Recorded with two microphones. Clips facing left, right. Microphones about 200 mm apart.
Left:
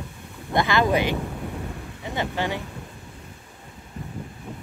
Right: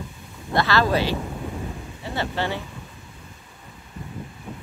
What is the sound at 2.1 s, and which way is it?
Speech, 15° left (ahead or behind).